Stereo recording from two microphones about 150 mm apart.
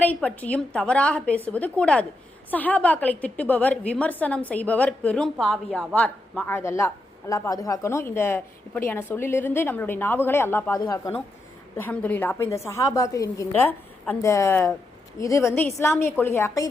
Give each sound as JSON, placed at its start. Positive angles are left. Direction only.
{"t": 0.0, "sound": "a woman's voice", "side_deg": 10}